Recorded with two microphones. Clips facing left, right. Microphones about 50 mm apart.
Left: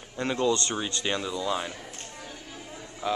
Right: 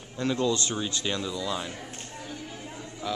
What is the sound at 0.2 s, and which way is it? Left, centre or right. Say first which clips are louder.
Speech: left 1 dB; left.